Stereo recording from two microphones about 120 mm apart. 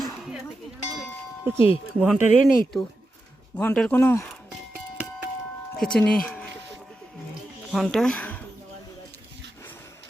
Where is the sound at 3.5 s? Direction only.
10° left (ahead or behind).